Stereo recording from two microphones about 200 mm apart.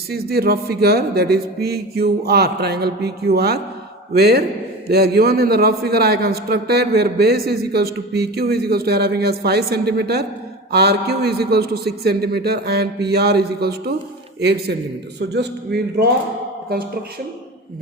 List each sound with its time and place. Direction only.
0.1 s a man's voice: 50° right (ahead or behind)